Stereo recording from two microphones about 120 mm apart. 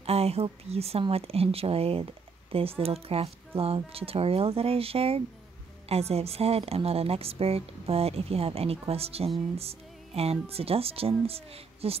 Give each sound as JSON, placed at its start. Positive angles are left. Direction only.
{"t": 0.0, "sound": "a woman's voice", "side_deg": -60}